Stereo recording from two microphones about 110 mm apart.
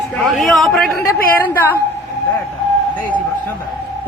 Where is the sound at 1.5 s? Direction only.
20° left (ahead or behind).